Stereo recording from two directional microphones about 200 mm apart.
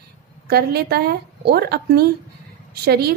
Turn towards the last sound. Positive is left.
turn(degrees=-50)  # may be behind; listen again after turning